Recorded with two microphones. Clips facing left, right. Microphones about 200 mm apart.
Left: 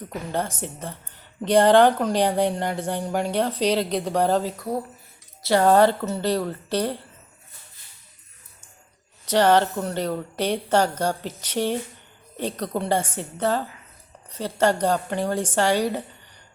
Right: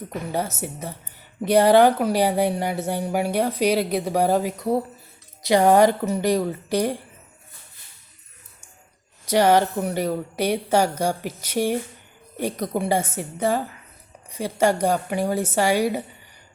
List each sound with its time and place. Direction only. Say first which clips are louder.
0.3 s speech: even; 10° right (ahead or behind)
9.2 s speech: right 1 dB; 10° right (ahead or behind)